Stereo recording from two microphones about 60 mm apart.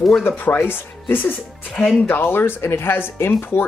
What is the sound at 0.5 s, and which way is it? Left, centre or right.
Speech, left.